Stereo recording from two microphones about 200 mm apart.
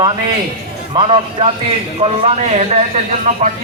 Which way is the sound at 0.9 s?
25° right (ahead or behind).